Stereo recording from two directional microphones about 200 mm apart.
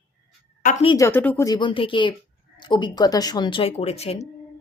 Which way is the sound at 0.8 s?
25° left (ahead or behind).